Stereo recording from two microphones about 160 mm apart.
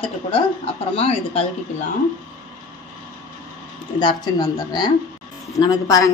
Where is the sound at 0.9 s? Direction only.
40° left (ahead or behind).